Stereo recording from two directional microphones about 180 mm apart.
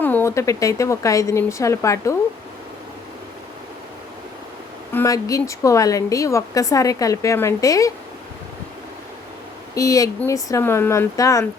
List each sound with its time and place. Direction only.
0.0 s a woman's voice: 10° left (ahead or behind)
4.9 s a woman's voice: 20° left (ahead or behind)
9.7 s a woman's voice: 20° left (ahead or behind)